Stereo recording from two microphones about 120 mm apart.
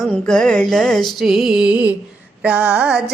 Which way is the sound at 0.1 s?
5° left (ahead or behind).